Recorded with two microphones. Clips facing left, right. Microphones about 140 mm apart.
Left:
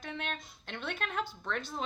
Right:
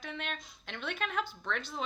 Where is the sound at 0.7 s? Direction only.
50° left (ahead or behind).